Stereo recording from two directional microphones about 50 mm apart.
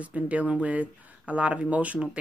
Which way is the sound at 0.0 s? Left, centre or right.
Right.